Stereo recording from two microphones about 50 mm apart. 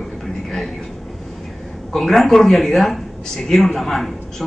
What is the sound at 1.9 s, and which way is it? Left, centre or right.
A man's voice, centre.